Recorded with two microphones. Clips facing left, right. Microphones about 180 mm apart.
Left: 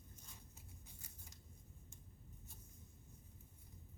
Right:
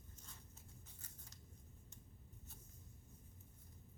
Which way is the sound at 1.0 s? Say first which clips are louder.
Left 1 dB; 10° left (ahead or behind).